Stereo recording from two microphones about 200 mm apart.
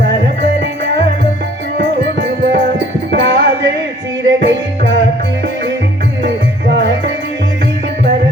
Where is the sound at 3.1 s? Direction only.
60° right (ahead or behind).